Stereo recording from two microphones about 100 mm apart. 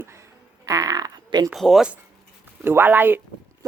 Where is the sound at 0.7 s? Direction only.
35° right (ahead or behind).